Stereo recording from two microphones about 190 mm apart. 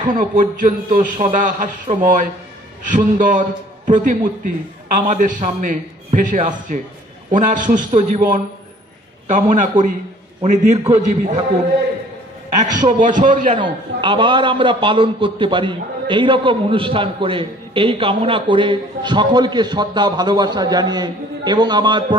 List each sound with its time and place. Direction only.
0.1 s a man's voice: 45° right (ahead or behind)
12.8 s a man's voice: 45° right (ahead or behind)
13.6 s a man's voice: 25° right (ahead or behind)